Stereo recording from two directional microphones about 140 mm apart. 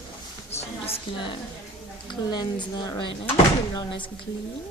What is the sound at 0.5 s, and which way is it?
Speech, 45° left (ahead or behind).